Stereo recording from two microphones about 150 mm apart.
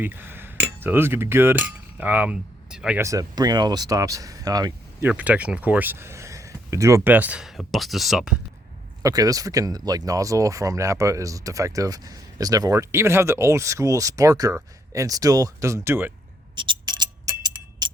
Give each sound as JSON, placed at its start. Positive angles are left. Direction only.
{"t": 0.0, "sound": "speech", "side_deg": -15}
{"t": 3.0, "sound": "speech", "side_deg": -20}
{"t": 5.0, "sound": "speech", "side_deg": -10}
{"t": 9.0, "sound": "speech", "side_deg": -25}
{"t": 16.6, "sound": "music", "side_deg": -30}